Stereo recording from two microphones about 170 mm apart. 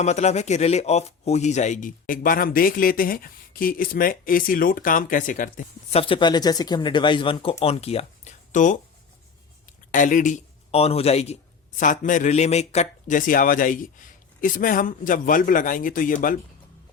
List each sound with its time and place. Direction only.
0.0 s speech: 40° left (ahead or behind)
5.9 s speech: 35° left (ahead or behind)
9.9 s speech: 50° left (ahead or behind)
11.8 s speech: 50° left (ahead or behind)